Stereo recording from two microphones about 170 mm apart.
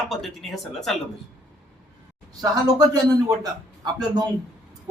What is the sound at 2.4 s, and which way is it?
A man's voice, 20° right (ahead or behind).